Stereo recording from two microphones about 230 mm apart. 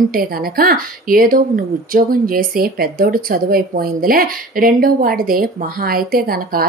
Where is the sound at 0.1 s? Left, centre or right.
Right.